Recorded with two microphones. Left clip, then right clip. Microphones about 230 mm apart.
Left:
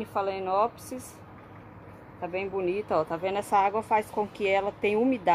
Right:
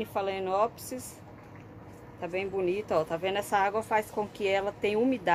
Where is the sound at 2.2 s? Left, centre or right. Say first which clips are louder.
Left 1 dB; centre.